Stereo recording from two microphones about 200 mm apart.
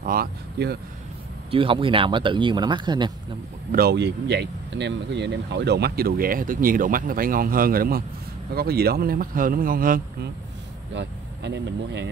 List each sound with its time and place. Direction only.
0.0 s speech: 50° right (ahead or behind)
1.5 s speech: 25° right (ahead or behind)
3.7 s speech: 55° right (ahead or behind)
11.0 s speech: 60° right (ahead or behind)